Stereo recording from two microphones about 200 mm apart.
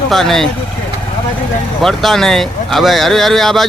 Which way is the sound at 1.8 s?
Centre (ahead or behind).